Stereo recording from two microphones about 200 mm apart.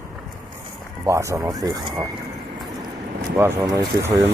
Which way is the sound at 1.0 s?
15° right (ahead or behind).